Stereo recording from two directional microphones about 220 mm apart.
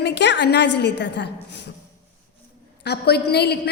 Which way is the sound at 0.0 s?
50° left (ahead or behind).